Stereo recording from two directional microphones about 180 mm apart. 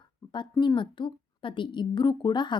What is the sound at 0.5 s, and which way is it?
A woman's voice, 25° left (ahead or behind).